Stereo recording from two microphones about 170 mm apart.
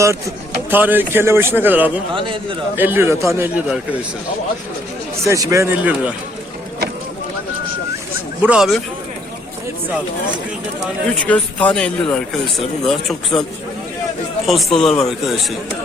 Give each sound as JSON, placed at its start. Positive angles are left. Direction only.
{"t": 0.7, "sound": "a man's voice", "side_deg": -10}
{"t": 2.1, "sound": "a man's voice", "side_deg": -30}
{"t": 2.7, "sound": "a man's voice", "side_deg": -10}
{"t": 5.2, "sound": "a man's voice", "side_deg": -20}
{"t": 8.4, "sound": "speech", "side_deg": -5}
{"t": 11.1, "sound": "speech", "side_deg": 5}
{"t": 14.4, "sound": "speech", "side_deg": 0}